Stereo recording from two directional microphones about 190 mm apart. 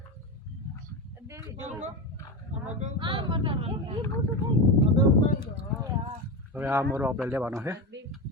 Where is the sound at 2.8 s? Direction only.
25° right (ahead or behind).